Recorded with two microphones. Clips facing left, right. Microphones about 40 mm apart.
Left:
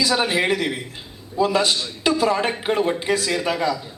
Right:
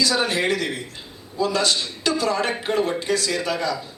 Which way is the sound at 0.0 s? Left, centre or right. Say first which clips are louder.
Left 1 dB; centre.